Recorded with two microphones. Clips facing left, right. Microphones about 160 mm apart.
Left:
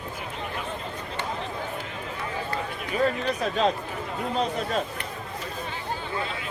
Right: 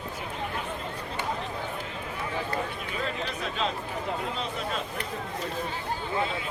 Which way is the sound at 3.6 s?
40° left (ahead or behind).